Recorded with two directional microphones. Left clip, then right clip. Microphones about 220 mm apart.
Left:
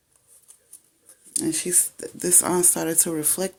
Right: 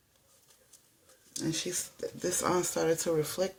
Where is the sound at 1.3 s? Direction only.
50° left (ahead or behind).